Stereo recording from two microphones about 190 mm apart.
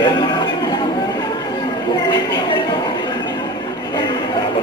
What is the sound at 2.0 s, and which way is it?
Speech, 20° left (ahead or behind).